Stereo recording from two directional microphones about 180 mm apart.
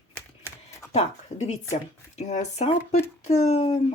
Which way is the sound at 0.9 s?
35° left (ahead or behind).